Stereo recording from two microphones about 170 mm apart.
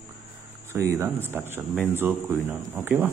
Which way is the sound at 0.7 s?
15° right (ahead or behind).